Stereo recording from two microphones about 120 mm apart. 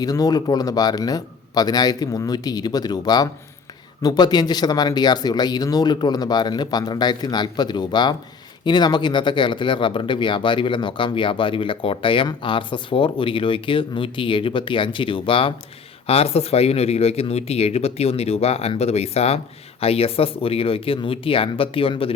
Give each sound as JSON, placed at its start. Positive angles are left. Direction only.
{"t": 0.0, "sound": "speech", "side_deg": 30}